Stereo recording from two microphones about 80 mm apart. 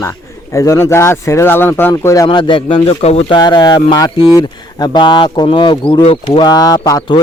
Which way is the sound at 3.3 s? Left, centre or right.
Left.